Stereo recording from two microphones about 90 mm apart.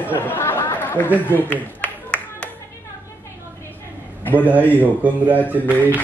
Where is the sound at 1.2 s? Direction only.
20° left (ahead or behind).